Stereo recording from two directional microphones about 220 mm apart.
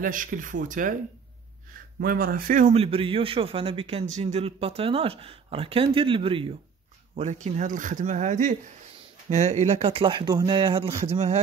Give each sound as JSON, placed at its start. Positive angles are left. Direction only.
{"t": 0.0, "sound": "speech", "side_deg": -35}
{"t": 2.0, "sound": "speech", "side_deg": -40}